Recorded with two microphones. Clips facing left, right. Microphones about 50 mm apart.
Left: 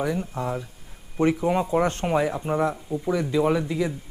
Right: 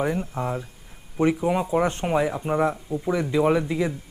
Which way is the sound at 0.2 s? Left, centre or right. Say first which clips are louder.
Right 1 dB; centre.